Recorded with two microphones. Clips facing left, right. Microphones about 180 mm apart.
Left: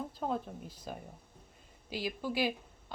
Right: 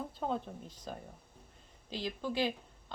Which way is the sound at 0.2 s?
5° left (ahead or behind).